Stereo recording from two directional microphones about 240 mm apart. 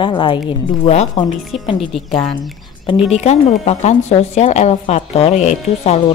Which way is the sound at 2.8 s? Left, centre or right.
Left.